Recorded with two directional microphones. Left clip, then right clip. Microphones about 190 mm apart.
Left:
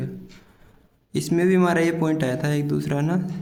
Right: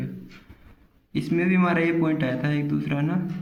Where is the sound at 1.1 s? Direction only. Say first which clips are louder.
Left 4 dB; 40° left (ahead or behind).